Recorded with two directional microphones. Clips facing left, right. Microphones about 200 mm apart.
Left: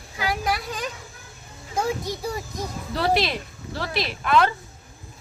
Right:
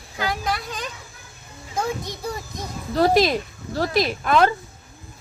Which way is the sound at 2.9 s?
45° right (ahead or behind).